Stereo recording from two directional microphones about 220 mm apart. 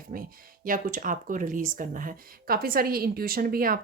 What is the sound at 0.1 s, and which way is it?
Speech, 40° right (ahead or behind).